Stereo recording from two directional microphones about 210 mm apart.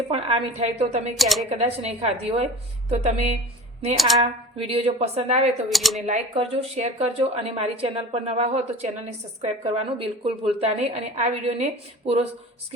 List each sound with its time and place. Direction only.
0.1 s a woman's voice: 30° right (ahead or behind)
1.1 s speech: centre (ahead or behind)
1.5 s a woman's voice: 30° right (ahead or behind)
3.9 s speech: centre (ahead or behind)
4.5 s speech: 25° right (ahead or behind)
5.6 s speech: centre (ahead or behind)
6.1 s a woman's voice: 30° right (ahead or behind)